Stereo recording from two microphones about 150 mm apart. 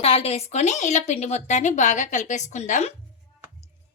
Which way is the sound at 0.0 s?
40° left (ahead or behind).